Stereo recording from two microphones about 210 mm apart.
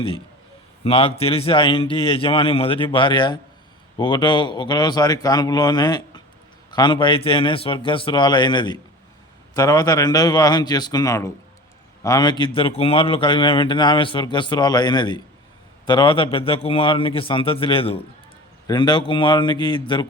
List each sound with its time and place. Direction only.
0.9 s a man's voice: 25° left (ahead or behind)